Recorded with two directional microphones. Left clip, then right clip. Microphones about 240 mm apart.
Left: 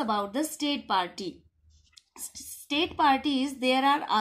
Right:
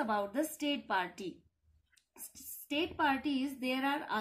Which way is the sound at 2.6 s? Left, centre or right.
Left.